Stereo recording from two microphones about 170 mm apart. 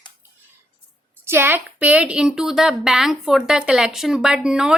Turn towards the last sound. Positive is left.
turn(degrees=-5)  # may be behind; listen again after turning